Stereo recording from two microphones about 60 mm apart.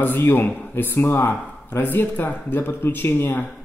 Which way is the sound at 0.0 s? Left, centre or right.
Left.